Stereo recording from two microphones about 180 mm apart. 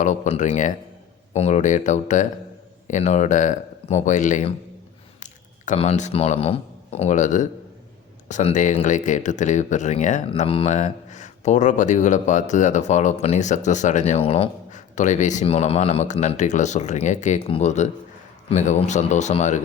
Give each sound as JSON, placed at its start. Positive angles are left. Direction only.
{"t": 0.0, "sound": "speech", "side_deg": 45}